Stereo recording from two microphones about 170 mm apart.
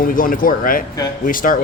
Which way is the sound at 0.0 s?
55° left (ahead or behind).